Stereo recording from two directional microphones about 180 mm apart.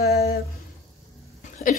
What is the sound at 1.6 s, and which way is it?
Speech, 55° left (ahead or behind).